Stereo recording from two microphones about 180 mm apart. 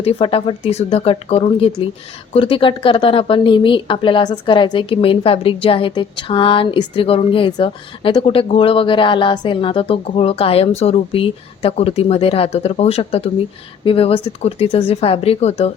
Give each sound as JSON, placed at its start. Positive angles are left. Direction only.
{"t": 0.0, "sound": "speech", "side_deg": 30}